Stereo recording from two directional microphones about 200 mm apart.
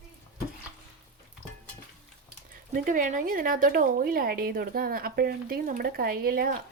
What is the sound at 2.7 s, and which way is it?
A woman's voice, 45° right (ahead or behind).